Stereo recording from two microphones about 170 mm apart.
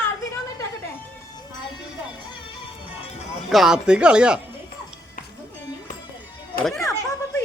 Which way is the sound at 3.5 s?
5° right (ahead or behind).